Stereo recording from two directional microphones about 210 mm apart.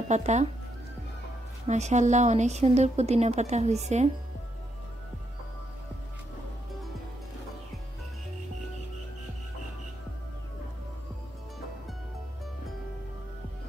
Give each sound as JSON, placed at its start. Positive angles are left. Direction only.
{"t": 0.1, "sound": "a woman's voice", "side_deg": -35}
{"t": 1.7, "sound": "a woman's voice", "side_deg": -35}